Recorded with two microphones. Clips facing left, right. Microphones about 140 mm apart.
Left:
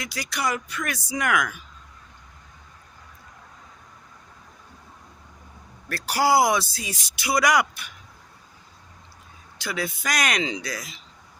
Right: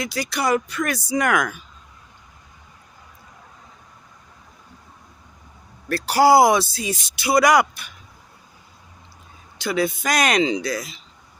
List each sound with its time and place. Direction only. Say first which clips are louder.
0.0 s speech: right 5 dB; 30° right (ahead or behind)
5.9 s speech: right 6 dB; 30° right (ahead or behind)
9.6 s speech: right 8 dB; 25° right (ahead or behind)